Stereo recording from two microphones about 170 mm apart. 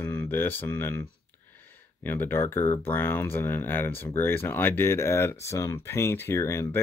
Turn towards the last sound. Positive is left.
turn(degrees=15)  # may be behind; listen again after turning